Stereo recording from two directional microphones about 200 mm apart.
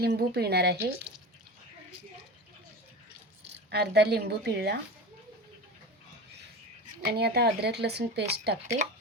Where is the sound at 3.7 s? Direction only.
55° right (ahead or behind).